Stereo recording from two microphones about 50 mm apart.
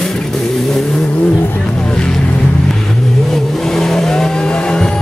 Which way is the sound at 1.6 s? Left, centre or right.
Centre.